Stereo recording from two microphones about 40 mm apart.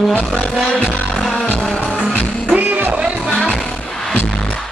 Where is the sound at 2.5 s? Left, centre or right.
Right.